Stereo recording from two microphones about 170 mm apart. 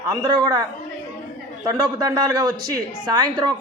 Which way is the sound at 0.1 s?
25° right (ahead or behind).